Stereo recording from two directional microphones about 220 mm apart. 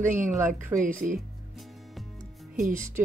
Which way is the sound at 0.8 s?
35° right (ahead or behind).